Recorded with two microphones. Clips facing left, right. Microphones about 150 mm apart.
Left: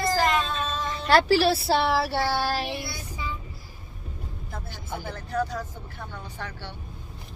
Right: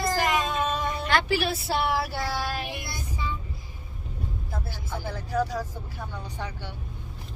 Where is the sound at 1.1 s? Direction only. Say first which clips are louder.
Left 7 dB; 35° left (ahead or behind).